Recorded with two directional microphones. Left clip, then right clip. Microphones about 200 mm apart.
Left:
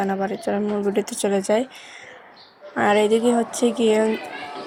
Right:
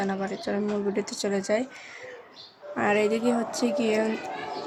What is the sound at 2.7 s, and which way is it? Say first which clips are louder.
Speech: left 6 dB; 10° left (ahead or behind).